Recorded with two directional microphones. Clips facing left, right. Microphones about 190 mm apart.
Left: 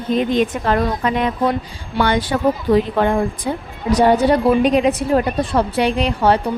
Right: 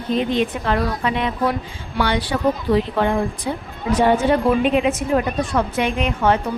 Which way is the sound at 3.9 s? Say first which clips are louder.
Left 3 dB; 40° left (ahead or behind).